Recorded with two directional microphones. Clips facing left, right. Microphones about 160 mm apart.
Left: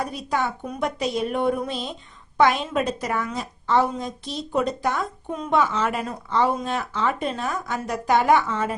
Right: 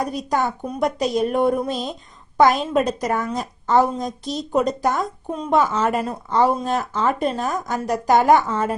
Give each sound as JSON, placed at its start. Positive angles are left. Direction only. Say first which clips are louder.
{"t": 0.0, "sound": "a woman's voice", "louder": "right 3 dB", "side_deg": -40}